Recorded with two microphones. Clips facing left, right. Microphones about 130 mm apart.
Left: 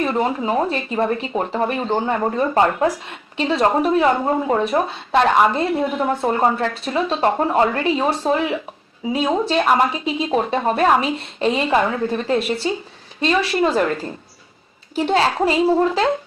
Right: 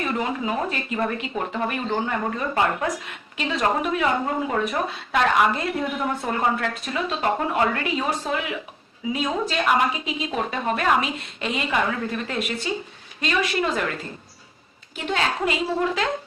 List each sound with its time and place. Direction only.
0.0 s speech: 35° left (ahead or behind)
14.9 s speech: 35° left (ahead or behind)